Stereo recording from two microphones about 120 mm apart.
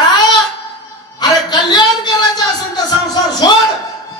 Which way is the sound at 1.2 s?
35° left (ahead or behind).